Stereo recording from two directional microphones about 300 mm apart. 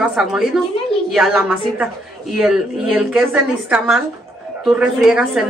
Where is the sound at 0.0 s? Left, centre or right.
Centre.